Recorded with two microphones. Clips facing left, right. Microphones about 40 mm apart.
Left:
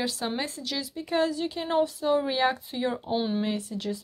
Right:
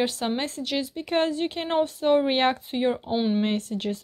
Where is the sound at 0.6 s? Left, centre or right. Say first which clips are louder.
Right 5 dB; right.